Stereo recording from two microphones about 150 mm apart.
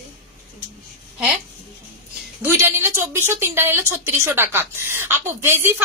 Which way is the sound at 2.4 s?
15° right (ahead or behind).